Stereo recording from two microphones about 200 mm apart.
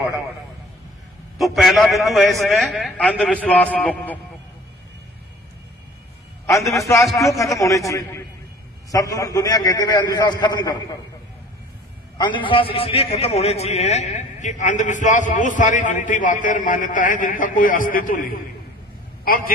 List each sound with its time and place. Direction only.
1.4 s a man's voice: centre (ahead or behind)
6.4 s a man's voice: 15° left (ahead or behind)
12.2 s a man's voice: 25° left (ahead or behind); by 19.5 s 45° left (ahead or behind)